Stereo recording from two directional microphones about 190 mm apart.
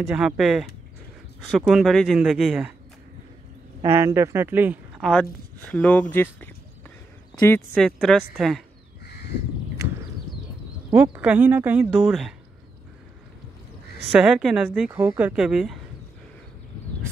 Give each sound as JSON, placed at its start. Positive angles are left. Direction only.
{"t": 0.0, "sound": "speech", "side_deg": -5}
{"t": 1.7, "sound": "speech", "side_deg": 0}
{"t": 3.9, "sound": "speech", "side_deg": -15}
{"t": 7.7, "sound": "speech", "side_deg": 0}
{"t": 9.8, "sound": "a sound", "side_deg": -15}
{"t": 10.9, "sound": "speech", "side_deg": -10}
{"t": 14.1, "sound": "speech", "side_deg": -5}